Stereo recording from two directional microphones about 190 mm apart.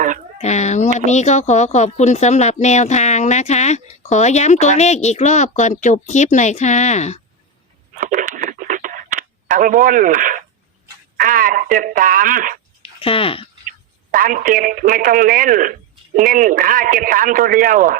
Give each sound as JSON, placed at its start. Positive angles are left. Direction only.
{"t": 0.3, "sound": "a sound", "side_deg": 35}
{"t": 0.9, "sound": "speech", "side_deg": 40}
{"t": 7.9, "sound": "radio", "side_deg": -45}
{"t": 11.2, "sound": "speech", "side_deg": -45}
{"t": 12.8, "sound": "a sound", "side_deg": 30}
{"t": 14.1, "sound": "speech", "side_deg": -45}